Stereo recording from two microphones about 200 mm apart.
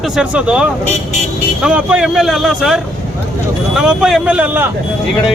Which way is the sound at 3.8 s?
5° right (ahead or behind).